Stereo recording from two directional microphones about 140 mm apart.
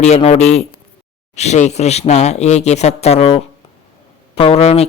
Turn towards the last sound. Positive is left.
turn(degrees=45)  # may be behind; listen again after turning